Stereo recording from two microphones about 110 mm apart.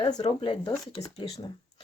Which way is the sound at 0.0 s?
85° left.